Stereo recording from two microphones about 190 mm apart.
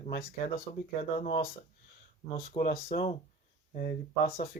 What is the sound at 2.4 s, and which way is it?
Speech, 45° left (ahead or behind).